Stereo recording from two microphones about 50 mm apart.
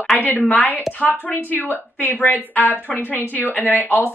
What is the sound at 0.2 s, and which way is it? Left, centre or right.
A woman's voice, left.